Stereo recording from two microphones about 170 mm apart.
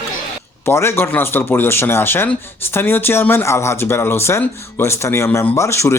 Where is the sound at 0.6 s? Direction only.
15° left (ahead or behind).